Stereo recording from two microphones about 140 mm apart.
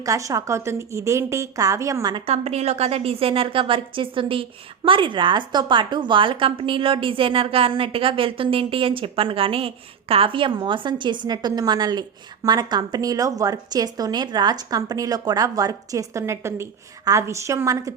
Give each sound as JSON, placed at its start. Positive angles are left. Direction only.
{"t": 0.0, "sound": "a woman's voice", "side_deg": -25}
{"t": 2.1, "sound": "a woman's voice", "side_deg": -45}